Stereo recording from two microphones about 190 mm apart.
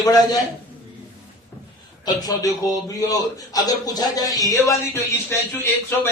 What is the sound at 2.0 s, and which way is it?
A man's voice, 20° left (ahead or behind).